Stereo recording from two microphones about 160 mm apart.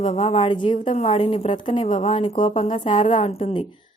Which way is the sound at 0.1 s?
40° left (ahead or behind).